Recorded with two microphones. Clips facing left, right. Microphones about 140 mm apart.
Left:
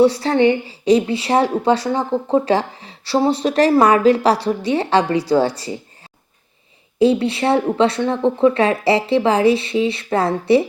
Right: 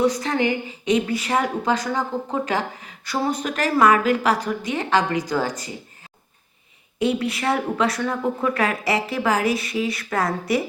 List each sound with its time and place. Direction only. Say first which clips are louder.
0.0 s a woman's voice: left 7 dB; 30° left (ahead or behind)
7.0 s speech: left 7 dB; 30° left (ahead or behind)